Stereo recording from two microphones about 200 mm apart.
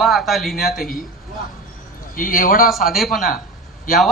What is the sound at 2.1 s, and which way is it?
Speech, 45° left (ahead or behind).